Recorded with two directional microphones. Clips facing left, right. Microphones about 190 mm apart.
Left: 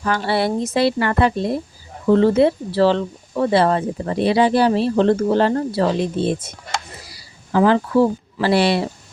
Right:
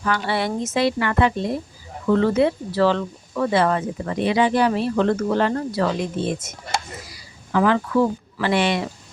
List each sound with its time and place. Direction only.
0.0 s speech: 35° left (ahead or behind)